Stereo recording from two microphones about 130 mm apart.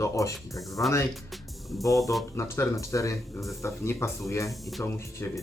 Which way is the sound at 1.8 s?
25° left (ahead or behind).